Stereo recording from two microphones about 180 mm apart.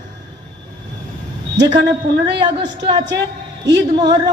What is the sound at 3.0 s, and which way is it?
Speech, 75° right (ahead or behind).